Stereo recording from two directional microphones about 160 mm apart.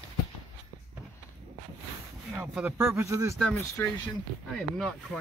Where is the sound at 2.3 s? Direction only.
5° right (ahead or behind).